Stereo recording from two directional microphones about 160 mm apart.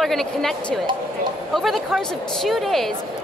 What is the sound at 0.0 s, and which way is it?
A woman's voice, centre (ahead or behind).